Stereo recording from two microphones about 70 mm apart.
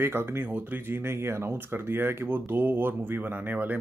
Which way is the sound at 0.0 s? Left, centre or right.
Right.